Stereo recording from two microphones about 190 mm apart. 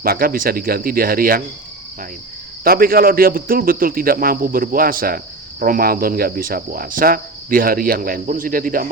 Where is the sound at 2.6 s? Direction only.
50° right (ahead or behind).